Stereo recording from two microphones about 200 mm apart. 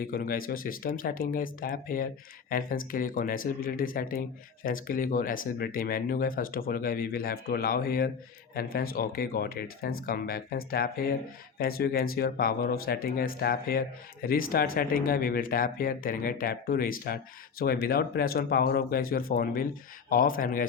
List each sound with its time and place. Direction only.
0.0 s speech: 45° left (ahead or behind)